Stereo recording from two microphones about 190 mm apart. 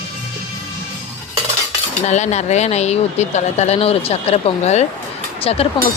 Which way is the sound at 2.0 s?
35° left (ahead or behind).